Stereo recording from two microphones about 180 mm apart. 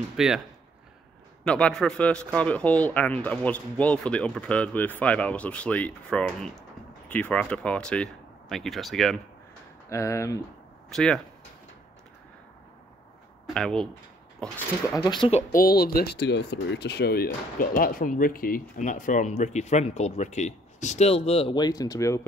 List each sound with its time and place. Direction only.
0.2 s speech: 5° right (ahead or behind)
1.4 s speech: 5° left (ahead or behind)
9.8 s speech: 15° left (ahead or behind)
10.9 s speech: centre (ahead or behind)
13.5 s speech: 5° left (ahead or behind)
15.0 s speech: 25° left (ahead or behind)
15.5 s speech: 55° left (ahead or behind); by 22.2 s 20° left (ahead or behind)